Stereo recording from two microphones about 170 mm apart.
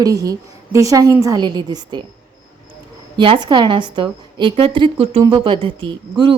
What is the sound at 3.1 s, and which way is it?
A woman's voice, 30° right (ahead or behind).